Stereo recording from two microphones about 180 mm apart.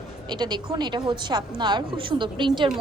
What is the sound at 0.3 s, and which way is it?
A woman's voice, 25° right (ahead or behind).